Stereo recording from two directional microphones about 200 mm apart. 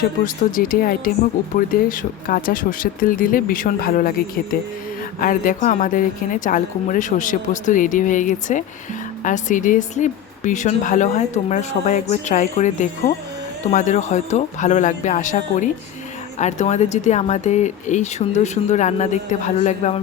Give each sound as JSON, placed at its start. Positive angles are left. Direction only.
{"t": 0.5, "sound": "speech", "side_deg": 45}
{"t": 5.2, "sound": "a woman's voice", "side_deg": 45}